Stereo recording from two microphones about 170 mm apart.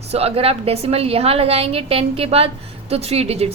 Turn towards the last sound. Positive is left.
turn(degrees=-35)  # may be behind; listen again after turning